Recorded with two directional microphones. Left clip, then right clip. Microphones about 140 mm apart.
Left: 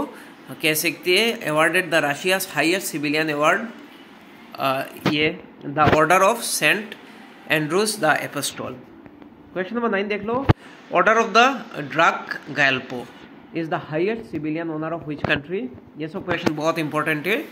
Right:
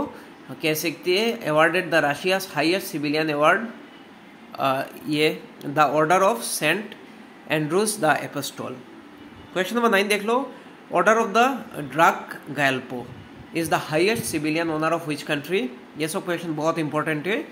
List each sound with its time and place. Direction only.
0.6 s speech: centre (ahead or behind)
5.1 s speech: 20° right (ahead or behind)
5.9 s speech: 5° left (ahead or behind)
9.5 s a man's voice: 20° right (ahead or behind)
10.9 s a man's voice: 5° right (ahead or behind)
16.0 s a man's voice: 15° right (ahead or behind)
16.3 s speech: 5° right (ahead or behind)